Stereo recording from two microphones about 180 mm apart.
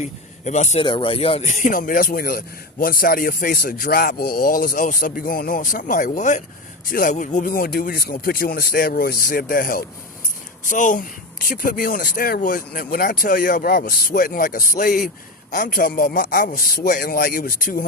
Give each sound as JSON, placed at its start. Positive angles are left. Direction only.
{"t": 0.0, "sound": "a man's voice", "side_deg": 40}